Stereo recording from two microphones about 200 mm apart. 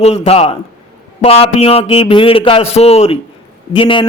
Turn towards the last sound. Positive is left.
turn(degrees=25)  # may be behind; listen again after turning